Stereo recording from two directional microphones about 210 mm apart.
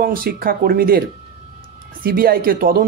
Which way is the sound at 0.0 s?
45° right (ahead or behind).